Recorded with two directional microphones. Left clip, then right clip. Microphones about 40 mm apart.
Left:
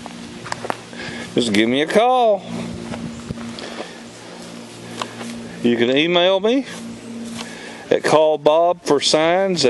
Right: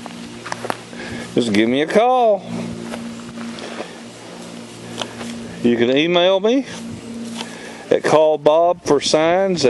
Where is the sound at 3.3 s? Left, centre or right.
Left.